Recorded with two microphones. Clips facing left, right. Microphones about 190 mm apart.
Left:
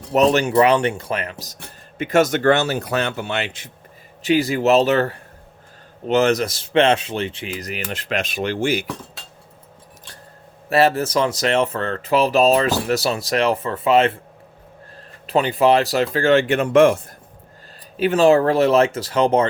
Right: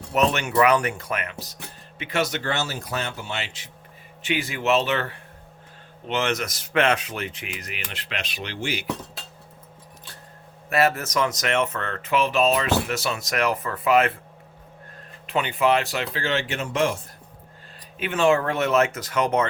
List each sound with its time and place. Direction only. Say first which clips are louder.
0.1 s speech: left 7 dB; 35° left (ahead or behind); by 3.7 s 55° left (ahead or behind)
4.2 s speech: left 9 dB; 40° left (ahead or behind)
10.7 s speech: left 5 dB; 30° left (ahead or behind)
15.3 s speech: left 6 dB; 35° left (ahead or behind); by 17.0 s 55° left (ahead or behind)
17.9 s speech: left 6 dB; 35° left (ahead or behind)